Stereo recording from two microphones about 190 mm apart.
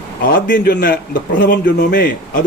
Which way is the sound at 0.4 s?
50° left (ahead or behind).